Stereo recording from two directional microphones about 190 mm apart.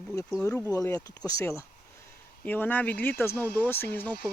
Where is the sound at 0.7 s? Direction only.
15° left (ahead or behind).